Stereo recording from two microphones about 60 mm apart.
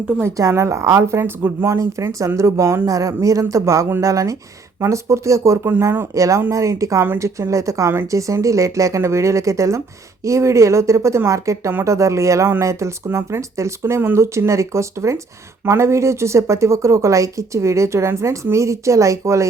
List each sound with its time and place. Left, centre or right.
0.5 s a woman's voice: right
2.8 s speech: right